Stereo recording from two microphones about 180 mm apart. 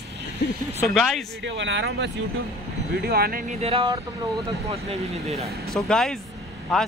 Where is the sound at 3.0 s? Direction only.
55° right (ahead or behind).